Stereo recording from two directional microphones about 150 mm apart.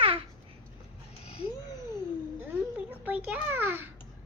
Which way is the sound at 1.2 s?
40° left (ahead or behind).